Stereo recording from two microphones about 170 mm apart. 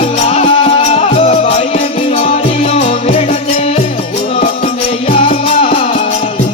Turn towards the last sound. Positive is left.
turn(degrees=35)  # may be behind; listen again after turning